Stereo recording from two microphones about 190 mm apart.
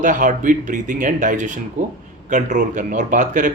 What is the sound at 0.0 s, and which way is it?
A man's voice, 45° right (ahead or behind).